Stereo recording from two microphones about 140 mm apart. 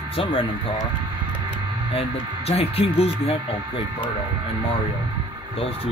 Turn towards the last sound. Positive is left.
turn(degrees=45)  # may be behind; listen again after turning